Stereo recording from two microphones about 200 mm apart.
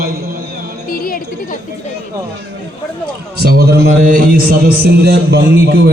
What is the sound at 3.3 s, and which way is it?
A man's voice, 50° right (ahead or behind).